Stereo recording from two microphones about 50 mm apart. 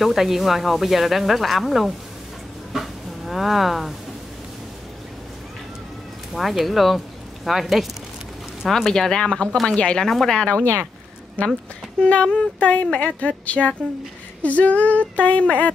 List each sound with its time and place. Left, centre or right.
0.0 s speech: centre
2.7 s a sound: centre
6.3 s speech: centre
8.6 s a woman's voice: centre
10.0 s speech: centre
12.0 s a woman's voice: left
14.4 s female singing: left